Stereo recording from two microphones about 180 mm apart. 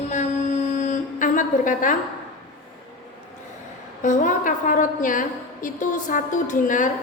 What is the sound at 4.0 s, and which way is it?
A woman's voice, 45° left (ahead or behind).